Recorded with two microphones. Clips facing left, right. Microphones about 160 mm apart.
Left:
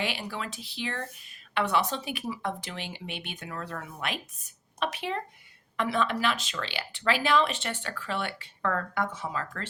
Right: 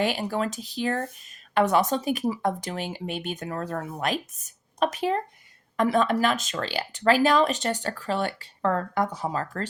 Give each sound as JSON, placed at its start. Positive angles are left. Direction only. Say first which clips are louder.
{"t": 0.0, "sound": "speech", "louder": "right 8 dB", "side_deg": -45}